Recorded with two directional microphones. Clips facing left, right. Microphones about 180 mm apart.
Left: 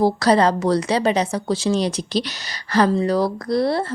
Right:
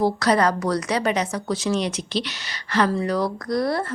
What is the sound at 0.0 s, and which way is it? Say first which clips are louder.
A woman's voice: left 3 dB; 30° left (ahead or behind).